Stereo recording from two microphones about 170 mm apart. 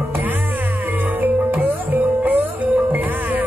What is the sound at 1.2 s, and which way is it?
Music, 10° right (ahead or behind).